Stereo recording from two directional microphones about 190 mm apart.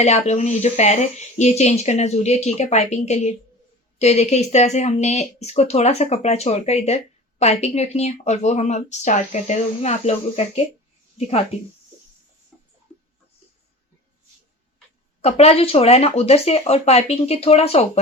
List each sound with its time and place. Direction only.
0.0 s speech: 35° left (ahead or behind)
15.2 s speech: 35° left (ahead or behind)